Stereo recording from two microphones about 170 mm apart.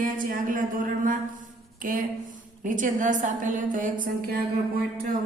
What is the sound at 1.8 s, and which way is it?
A woman's voice, 55° right (ahead or behind).